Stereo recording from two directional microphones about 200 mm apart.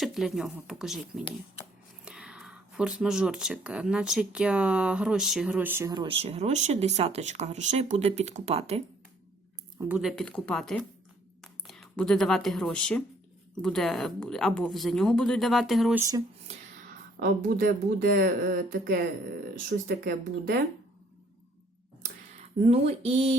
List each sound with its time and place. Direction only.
0.0 s speech: centre (ahead or behind); by 8.8 s 30° right (ahead or behind)
9.8 s speech: 5° right (ahead or behind)
16.0 s speech: 15° right (ahead or behind)
16.5 s whispering: 35° right (ahead or behind)
17.2 s speech: 45° right (ahead or behind)
22.6 s speech: 30° right (ahead or behind)